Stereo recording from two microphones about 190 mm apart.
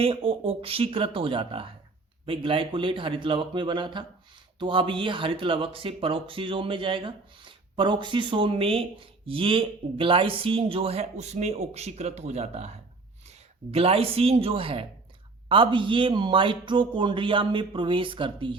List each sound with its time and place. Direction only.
0.0 s speech: 30° right (ahead or behind)